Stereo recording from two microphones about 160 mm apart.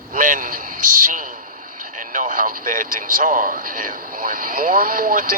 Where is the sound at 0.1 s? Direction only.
55° right (ahead or behind).